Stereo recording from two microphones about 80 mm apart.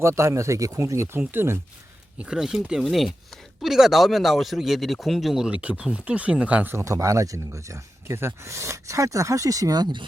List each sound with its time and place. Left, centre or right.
0.0 s speech: right
2.1 s speech: centre
5.6 s speech: centre
6.7 s speech: right